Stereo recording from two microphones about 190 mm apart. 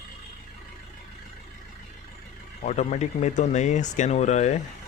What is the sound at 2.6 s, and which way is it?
Speech, 40° left (ahead or behind).